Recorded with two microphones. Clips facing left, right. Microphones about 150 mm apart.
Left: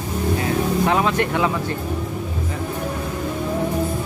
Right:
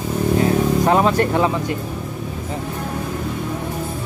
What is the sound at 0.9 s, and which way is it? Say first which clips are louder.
Speech: right 3 dB; 40° right (ahead or behind).